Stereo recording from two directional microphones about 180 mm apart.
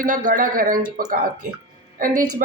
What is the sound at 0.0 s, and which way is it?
Speech, 50° right (ahead or behind).